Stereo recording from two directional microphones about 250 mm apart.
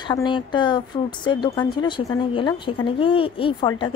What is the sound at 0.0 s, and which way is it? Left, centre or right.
Speech, centre.